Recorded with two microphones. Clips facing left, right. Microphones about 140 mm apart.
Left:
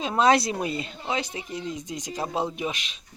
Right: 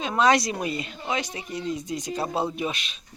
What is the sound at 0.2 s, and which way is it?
Speech, 30° left (ahead or behind).